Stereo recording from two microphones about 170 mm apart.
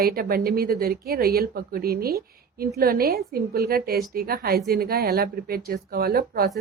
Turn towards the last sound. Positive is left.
turn(degrees=-65)  # may be behind; listen again after turning